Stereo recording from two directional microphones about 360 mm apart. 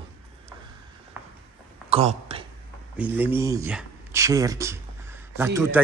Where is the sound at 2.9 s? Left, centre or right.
Centre.